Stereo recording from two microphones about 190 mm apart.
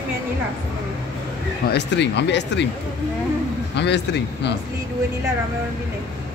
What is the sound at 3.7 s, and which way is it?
Speech, 65° left (ahead or behind).